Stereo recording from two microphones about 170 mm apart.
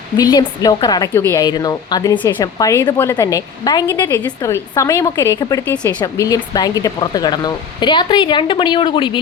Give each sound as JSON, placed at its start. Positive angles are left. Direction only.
{"t": 0.2, "sound": "a woman's voice", "side_deg": 20}